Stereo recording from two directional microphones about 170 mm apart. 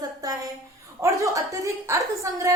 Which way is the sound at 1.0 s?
20° right (ahead or behind).